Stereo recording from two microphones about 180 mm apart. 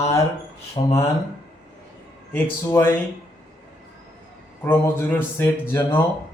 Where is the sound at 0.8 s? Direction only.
30° left (ahead or behind).